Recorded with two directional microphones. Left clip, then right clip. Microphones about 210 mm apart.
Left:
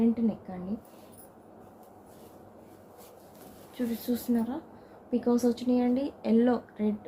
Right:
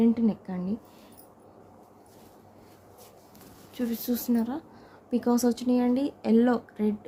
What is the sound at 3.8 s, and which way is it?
Speech, 30° right (ahead or behind).